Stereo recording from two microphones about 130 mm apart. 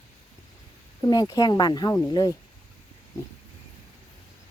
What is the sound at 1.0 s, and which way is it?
Speech, 30° left (ahead or behind).